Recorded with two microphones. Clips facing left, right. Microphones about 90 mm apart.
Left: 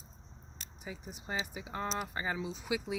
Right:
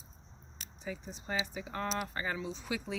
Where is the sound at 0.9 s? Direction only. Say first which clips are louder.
Right 2 dB; 15° left (ahead or behind).